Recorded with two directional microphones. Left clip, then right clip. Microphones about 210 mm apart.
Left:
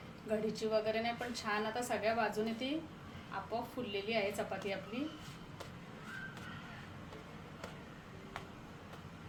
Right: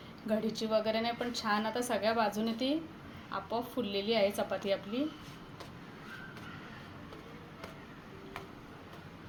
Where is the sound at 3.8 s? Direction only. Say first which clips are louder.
Right 7 dB; 35° right (ahead or behind).